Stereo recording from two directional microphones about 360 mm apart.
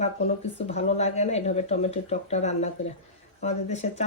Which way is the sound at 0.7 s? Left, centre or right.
Centre.